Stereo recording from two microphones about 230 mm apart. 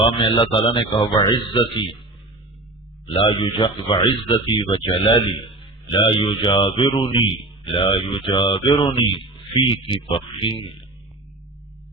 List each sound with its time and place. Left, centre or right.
0.1 s speech: left
3.2 s speech: left